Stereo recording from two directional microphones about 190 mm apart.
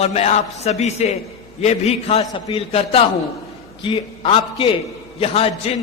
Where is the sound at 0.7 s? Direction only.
35° left (ahead or behind).